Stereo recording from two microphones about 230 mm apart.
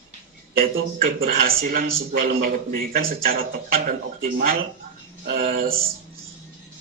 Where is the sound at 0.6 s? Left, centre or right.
Right.